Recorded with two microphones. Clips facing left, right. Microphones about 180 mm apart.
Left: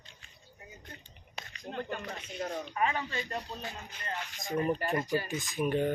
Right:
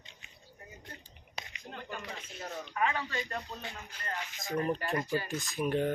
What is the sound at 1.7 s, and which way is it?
Rapping, 40° left (ahead or behind).